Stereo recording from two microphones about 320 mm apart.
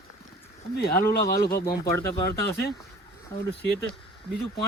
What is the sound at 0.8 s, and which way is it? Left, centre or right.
Speech, left.